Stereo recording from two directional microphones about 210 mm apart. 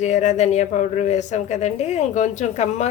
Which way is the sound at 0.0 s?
35° left (ahead or behind).